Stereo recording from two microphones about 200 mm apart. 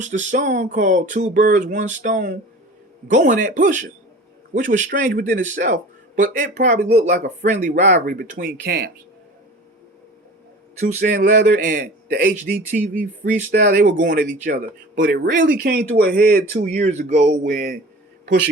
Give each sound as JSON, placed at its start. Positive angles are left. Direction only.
{"t": 0.0, "sound": "a man's voice", "side_deg": -35}
{"t": 10.8, "sound": "a man's voice", "side_deg": -40}
{"t": 16.5, "sound": "a man's voice", "side_deg": -35}